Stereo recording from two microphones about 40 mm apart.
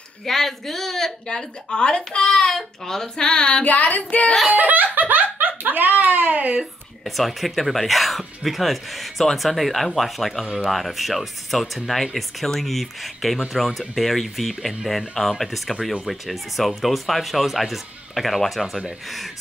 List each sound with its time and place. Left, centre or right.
0.2 s speech: centre
1.2 s speech: left
3.6 s child singing: left
4.5 s speech: right
6.6 s speech: centre